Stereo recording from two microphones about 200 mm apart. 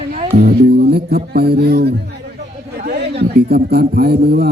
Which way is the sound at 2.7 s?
55° right (ahead or behind).